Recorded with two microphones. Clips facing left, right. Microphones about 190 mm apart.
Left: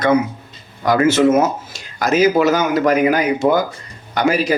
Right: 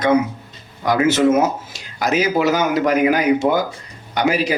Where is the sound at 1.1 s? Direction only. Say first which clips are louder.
Left 2 dB; 15° right (ahead or behind).